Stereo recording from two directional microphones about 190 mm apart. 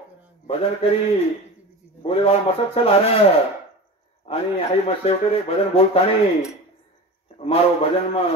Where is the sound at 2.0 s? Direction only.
30° left (ahead or behind).